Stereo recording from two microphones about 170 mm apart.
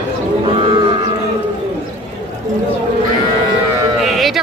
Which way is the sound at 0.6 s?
35° right (ahead or behind).